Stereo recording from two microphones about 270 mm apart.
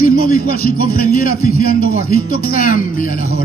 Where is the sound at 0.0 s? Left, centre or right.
Left.